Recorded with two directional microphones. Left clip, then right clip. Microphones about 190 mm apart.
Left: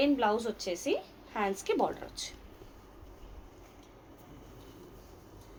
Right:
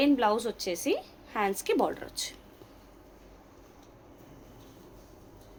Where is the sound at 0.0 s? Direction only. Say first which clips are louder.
Right 3 dB; 60° right (ahead or behind).